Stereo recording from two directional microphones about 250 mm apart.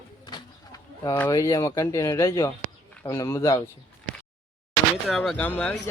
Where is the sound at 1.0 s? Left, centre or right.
Centre.